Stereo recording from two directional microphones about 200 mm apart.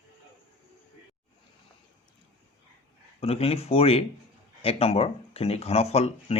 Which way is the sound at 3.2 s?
30° left (ahead or behind).